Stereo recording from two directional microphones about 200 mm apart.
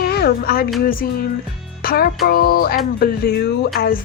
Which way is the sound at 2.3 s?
50° left (ahead or behind).